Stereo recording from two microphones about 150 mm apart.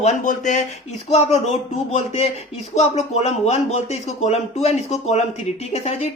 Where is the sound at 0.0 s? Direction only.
50° left (ahead or behind).